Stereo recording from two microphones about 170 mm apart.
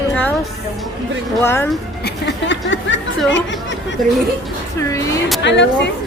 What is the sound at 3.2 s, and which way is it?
Chatter, 90° left.